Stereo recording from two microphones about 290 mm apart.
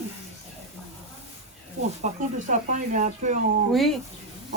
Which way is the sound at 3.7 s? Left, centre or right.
Centre.